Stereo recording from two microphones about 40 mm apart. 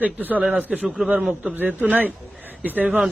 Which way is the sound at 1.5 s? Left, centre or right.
Right.